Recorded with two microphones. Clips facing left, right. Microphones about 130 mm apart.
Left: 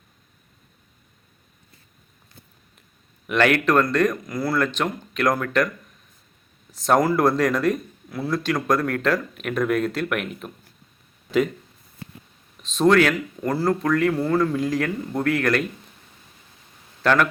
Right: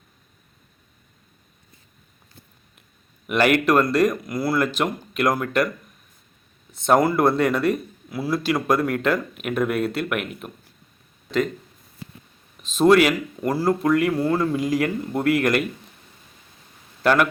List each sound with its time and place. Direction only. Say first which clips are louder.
3.2 s speech: right 1 dB; 10° right (ahead or behind)
6.8 s a man's voice: right 1 dB; centre (ahead or behind)
12.6 s speech: right 2 dB; 5° right (ahead or behind)
17.0 s speech: right 1 dB; 10° right (ahead or behind)